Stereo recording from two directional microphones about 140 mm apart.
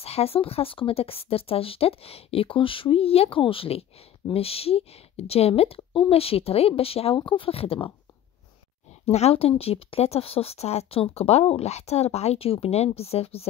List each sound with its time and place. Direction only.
0.0 s a woman's voice: 45° left (ahead or behind)
9.0 s a woman's voice: 45° left (ahead or behind)